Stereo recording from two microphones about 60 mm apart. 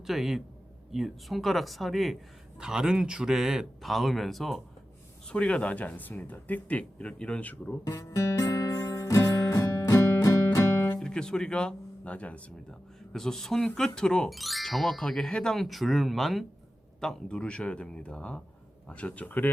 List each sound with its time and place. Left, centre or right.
0.0 s a man's voice: centre
2.6 s a man's voice: centre
5.3 s speech: centre
7.9 s speech: left
8.4 s music: left
11.0 s speech: centre
13.1 s speech: centre
14.3 s speech: centre
17.0 s speech: centre; by 19.5 s left